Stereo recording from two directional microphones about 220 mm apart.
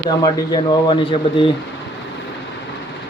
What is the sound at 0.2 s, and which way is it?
Speech, 20° left (ahead or behind).